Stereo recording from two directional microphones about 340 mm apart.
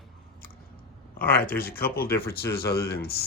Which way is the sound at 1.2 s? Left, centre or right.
Centre.